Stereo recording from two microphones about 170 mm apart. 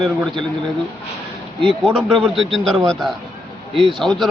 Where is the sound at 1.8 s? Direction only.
5° right (ahead or behind).